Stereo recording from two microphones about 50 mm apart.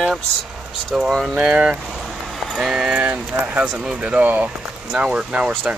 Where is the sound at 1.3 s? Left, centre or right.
Centre.